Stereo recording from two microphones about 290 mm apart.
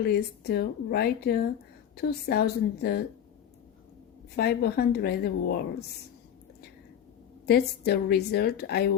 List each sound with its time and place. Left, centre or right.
0.0 s a woman's voice: left
4.4 s a woman's voice: left
7.4 s a woman's voice: left